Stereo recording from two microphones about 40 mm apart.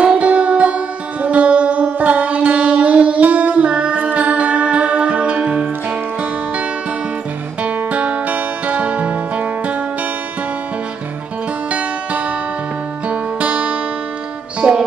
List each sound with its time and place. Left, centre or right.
0.0 s music: right
7.6 s music: right
13.1 s music: right
14.6 s music: right